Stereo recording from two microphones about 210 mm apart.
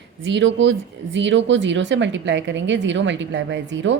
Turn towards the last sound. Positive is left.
turn(degrees=-60)  # may be behind; listen again after turning